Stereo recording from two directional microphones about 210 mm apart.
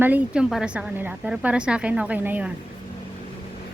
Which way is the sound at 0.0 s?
5° right (ahead or behind).